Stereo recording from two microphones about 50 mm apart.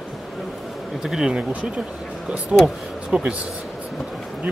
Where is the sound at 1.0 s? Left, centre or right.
Centre.